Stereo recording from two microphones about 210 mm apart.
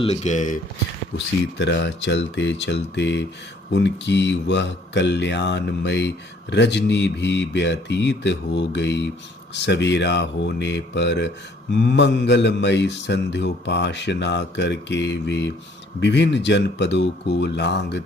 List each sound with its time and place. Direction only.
0.0 s speech: 30° left (ahead or behind)
1.5 s speech: 55° left (ahead or behind)